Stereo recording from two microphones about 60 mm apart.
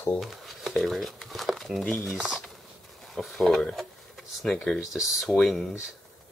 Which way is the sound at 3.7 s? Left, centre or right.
Centre.